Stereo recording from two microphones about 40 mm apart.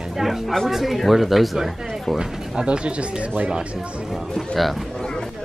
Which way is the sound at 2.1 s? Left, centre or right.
Right.